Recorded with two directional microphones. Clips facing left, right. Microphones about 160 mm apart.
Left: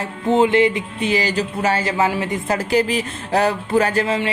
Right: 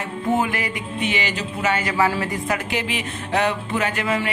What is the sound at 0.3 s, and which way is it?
Speech, 25° left (ahead or behind).